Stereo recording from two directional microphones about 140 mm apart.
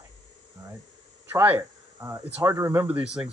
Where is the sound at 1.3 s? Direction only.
15° right (ahead or behind).